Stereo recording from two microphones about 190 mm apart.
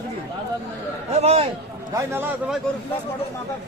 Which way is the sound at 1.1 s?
35° right (ahead or behind).